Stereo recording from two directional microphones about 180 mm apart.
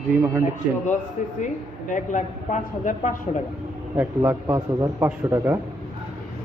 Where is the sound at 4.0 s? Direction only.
10° right (ahead or behind).